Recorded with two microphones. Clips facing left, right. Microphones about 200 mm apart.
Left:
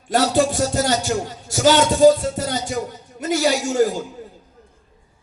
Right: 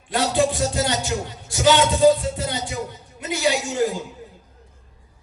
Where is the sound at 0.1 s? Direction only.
45° left (ahead or behind).